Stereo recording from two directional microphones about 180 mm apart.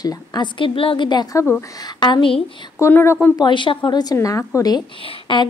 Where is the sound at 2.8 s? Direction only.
15° left (ahead or behind).